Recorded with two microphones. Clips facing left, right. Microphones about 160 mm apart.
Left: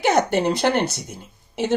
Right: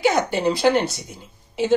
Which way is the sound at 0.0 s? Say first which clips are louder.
Left 1 dB; 65° left (ahead or behind).